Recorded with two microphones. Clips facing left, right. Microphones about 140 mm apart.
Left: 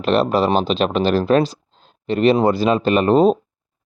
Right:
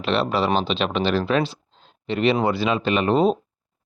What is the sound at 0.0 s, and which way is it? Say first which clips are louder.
Speech: left 5 dB; 45° left (ahead or behind).